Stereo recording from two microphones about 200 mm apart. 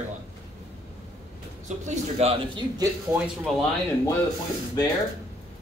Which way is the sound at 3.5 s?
Centre (ahead or behind).